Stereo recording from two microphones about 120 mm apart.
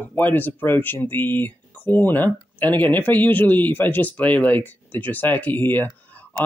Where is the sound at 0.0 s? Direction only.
15° left (ahead or behind).